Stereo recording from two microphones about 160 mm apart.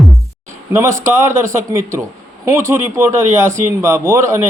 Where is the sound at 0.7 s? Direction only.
15° right (ahead or behind).